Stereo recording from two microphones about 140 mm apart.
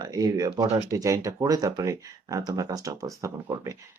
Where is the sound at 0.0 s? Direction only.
30° right (ahead or behind).